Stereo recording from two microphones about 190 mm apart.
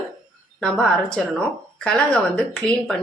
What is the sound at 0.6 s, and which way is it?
A woman's voice, 5° left (ahead or behind).